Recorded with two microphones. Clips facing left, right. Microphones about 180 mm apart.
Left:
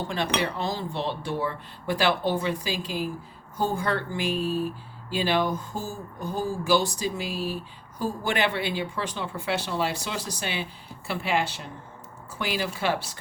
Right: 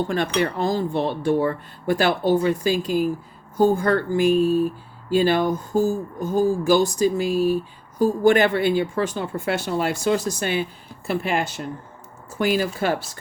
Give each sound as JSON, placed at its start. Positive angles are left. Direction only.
{"t": 0.3, "sound": "speech", "side_deg": -50}